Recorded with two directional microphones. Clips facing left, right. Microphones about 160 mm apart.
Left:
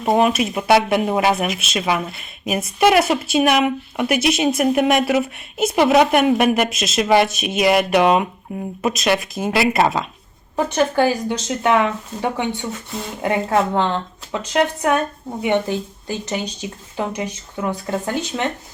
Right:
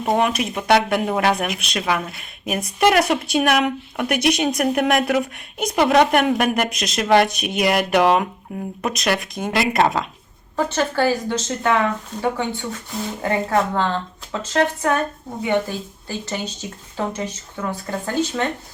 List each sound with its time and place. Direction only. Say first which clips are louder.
0.0 s speech: left 3 dB; 5° left (ahead or behind)
10.7 s a woman's voice: left 3 dB; 15° left (ahead or behind)